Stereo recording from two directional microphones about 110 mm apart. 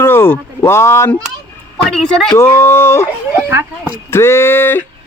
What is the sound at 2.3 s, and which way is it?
Speech, 20° left (ahead or behind).